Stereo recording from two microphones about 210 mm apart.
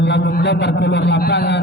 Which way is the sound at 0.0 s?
55° left (ahead or behind).